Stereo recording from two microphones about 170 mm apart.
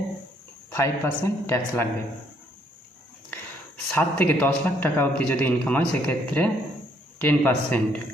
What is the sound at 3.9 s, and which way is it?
A man's voice, 10° left (ahead or behind).